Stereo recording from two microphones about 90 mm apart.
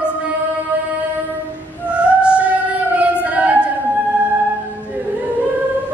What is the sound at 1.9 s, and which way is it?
Music, 10° right (ahead or behind).